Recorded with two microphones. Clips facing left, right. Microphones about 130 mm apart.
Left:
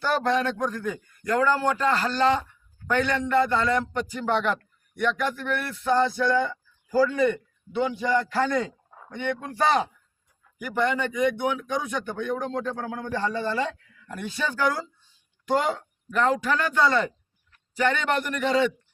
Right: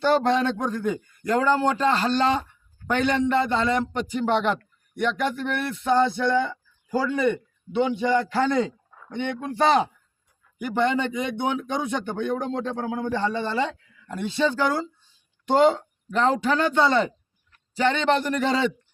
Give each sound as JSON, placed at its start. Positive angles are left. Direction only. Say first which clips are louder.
{"t": 0.0, "sound": "a man's voice", "louder": "right 3 dB", "side_deg": -25}